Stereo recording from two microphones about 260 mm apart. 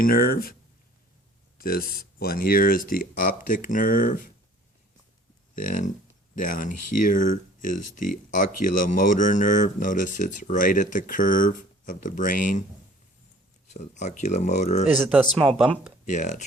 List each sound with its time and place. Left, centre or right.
0.0 s speech: left
1.5 s speech: left
5.5 s speech: left
6.7 s speech: left
7.0 s speech: left
13.7 s speech: left
15.0 s speech: centre
16.0 s speech: left